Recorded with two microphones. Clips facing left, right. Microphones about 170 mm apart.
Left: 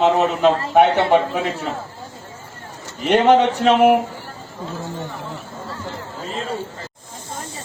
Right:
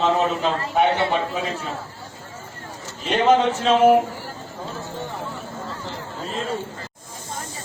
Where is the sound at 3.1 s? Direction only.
70° left (ahead or behind).